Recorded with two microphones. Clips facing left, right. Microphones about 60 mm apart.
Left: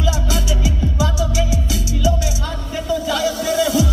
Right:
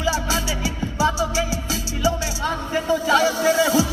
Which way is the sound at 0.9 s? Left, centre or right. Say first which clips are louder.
Right 5 dB; right.